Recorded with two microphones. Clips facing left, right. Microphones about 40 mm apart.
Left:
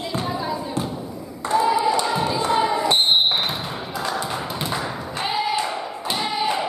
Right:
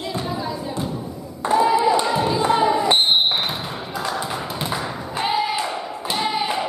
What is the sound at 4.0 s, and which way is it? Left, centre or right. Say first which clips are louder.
Thump: even; centre.